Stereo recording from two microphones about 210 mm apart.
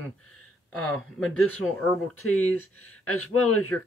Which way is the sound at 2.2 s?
85° left.